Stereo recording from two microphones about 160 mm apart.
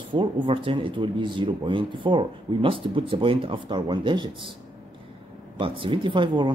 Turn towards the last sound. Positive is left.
turn(degrees=-30)  # may be behind; listen again after turning